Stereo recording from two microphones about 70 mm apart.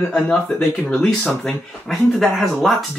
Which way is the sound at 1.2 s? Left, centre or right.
Centre.